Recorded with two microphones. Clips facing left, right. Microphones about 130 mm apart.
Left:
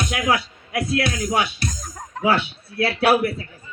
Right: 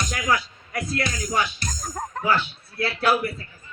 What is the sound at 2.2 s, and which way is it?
A man's voice, 70° left (ahead or behind).